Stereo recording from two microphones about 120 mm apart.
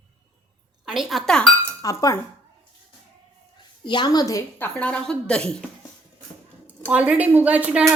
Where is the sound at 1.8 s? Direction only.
30° left (ahead or behind).